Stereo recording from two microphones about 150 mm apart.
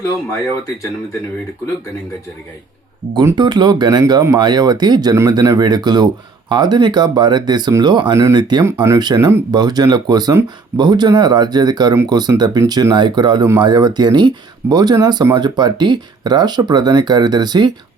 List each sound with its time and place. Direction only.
3.3 s speech: 30° right (ahead or behind)
8.6 s speech: 15° right (ahead or behind)
9.0 s speech: 25° right (ahead or behind)